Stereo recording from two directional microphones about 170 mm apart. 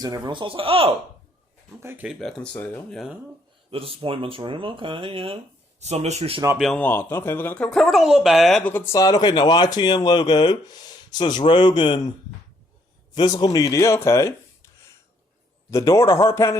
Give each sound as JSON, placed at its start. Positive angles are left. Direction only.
{"t": 0.0, "sound": "speech", "side_deg": -25}
{"t": 1.8, "sound": "speech", "side_deg": -10}
{"t": 2.1, "sound": "a man's voice", "side_deg": 5}
{"t": 3.7, "sound": "speech", "side_deg": -35}
{"t": 6.6, "sound": "speech", "side_deg": 5}
{"t": 8.7, "sound": "speech", "side_deg": 15}
{"t": 13.1, "sound": "speech", "side_deg": 25}
{"t": 15.7, "sound": "a man's voice", "side_deg": 20}